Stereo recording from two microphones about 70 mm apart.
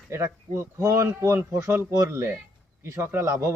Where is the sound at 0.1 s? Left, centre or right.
Right.